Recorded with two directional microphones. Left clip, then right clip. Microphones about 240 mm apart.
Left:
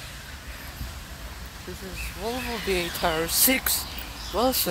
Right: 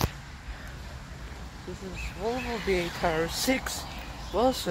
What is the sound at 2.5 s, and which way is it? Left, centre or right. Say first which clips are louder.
Speech: left 2 dB; left.